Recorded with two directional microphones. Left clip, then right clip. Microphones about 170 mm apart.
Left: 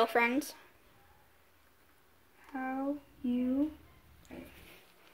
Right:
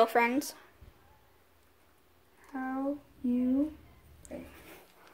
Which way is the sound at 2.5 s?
25° right (ahead or behind).